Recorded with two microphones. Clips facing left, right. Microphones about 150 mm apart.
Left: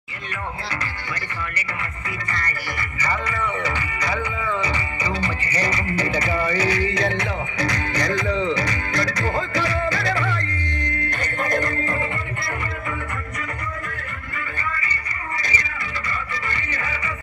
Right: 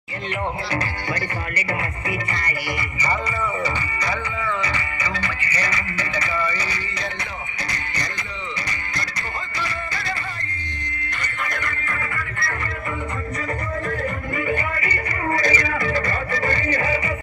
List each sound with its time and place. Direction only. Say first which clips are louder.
3.0 s speech: even; 5° right (ahead or behind)
4.6 s music: left 2 dB; 20° left (ahead or behind); by 10.4 s 80° left
11.1 s music: left 5 dB; 45° left (ahead or behind)
15.3 s music: right 7 dB; 45° right (ahead or behind)